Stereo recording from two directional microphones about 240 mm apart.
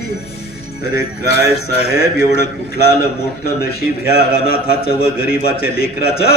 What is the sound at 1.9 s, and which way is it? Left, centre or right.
Speech, left.